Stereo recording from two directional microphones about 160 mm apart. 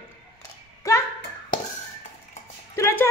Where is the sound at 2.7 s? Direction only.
15° left (ahead or behind).